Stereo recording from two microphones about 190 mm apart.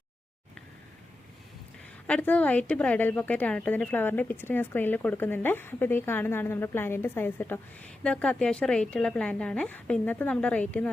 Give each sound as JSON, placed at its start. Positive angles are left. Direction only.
{"t": 2.0, "sound": "speech", "side_deg": 5}